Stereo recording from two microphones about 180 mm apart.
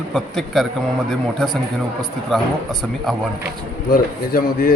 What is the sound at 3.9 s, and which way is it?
Speech, 55° left (ahead or behind).